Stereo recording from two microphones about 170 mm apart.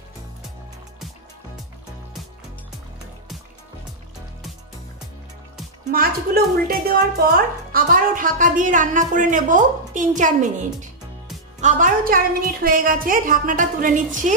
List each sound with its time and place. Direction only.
5.9 s speech: 60° right (ahead or behind)